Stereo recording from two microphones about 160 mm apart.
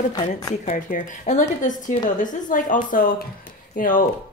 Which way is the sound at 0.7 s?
55° left (ahead or behind).